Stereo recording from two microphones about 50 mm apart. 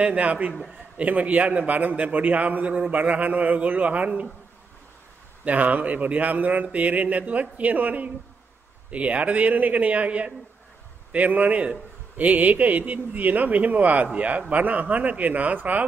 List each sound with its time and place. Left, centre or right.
0.0 s a man's voice: right
5.4 s a man's voice: right